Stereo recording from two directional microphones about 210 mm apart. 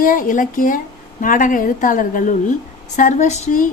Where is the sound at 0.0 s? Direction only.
40° left (ahead or behind).